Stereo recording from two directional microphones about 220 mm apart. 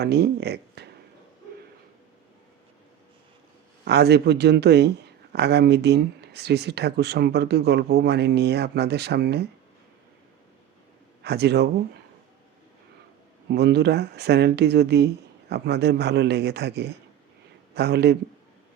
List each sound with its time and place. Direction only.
0.0 s a man's voice: 45° right (ahead or behind)
3.8 s a man's voice: 50° right (ahead or behind)
11.2 s a man's voice: 50° right (ahead or behind)
13.5 s a man's voice: 50° right (ahead or behind)